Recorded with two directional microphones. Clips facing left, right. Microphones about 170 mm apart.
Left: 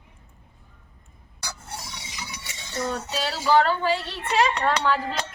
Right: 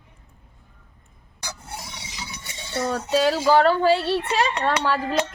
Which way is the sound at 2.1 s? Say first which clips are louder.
Right 3 dB; 30° right (ahead or behind).